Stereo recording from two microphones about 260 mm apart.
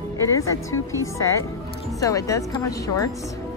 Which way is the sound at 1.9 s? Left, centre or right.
Centre.